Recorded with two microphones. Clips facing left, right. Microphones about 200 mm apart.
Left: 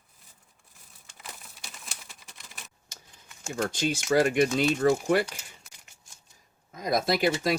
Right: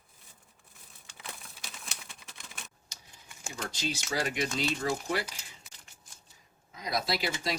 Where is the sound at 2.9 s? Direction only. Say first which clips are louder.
Left 3 dB; 55° left (ahead or behind).